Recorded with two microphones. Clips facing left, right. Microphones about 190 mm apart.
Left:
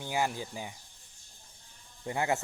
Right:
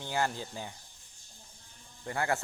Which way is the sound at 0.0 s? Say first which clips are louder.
Left 1 dB; 10° left (ahead or behind).